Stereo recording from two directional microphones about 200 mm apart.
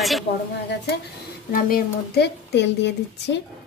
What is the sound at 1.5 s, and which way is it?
A woman's voice, 45° left (ahead or behind).